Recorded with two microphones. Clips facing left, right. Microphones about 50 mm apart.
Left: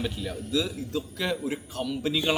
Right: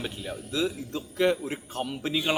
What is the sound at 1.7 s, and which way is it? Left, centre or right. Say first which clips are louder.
Speech: left 1 dB; right.